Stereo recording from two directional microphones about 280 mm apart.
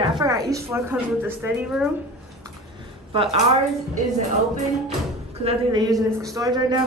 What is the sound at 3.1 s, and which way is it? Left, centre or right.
Speech, centre.